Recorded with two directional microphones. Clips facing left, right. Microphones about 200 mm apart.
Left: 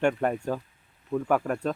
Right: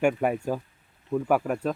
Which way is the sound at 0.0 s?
10° right (ahead or behind).